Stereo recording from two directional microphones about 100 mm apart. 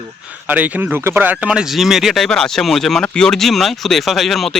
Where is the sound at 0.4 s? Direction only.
15° right (ahead or behind).